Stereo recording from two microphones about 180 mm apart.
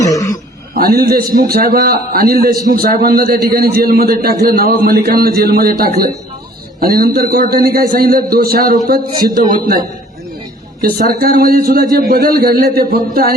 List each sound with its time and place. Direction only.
0.0 s a sound: 20° left (ahead or behind)
0.7 s a man's voice: 55° right (ahead or behind)
10.8 s a woman's voice: 55° right (ahead or behind)